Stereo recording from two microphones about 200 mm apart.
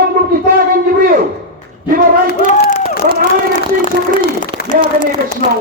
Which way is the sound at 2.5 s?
35° left (ahead or behind).